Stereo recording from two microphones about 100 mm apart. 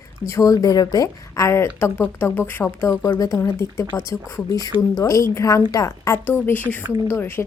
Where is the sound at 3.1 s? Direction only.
35° left (ahead or behind).